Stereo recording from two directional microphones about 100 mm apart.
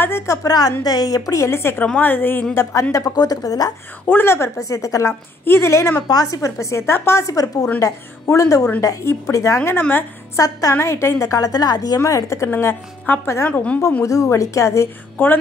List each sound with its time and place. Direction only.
0.0 s a woman's voice: 25° left (ahead or behind)
4.0 s a woman's voice: 20° left (ahead or behind)
6.0 s a woman's voice: 35° left (ahead or behind)
12.0 s a woman's voice: 30° left (ahead or behind)
13.5 s a woman's voice: 10° left (ahead or behind)
14.0 s a woman's voice: 30° left (ahead or behind)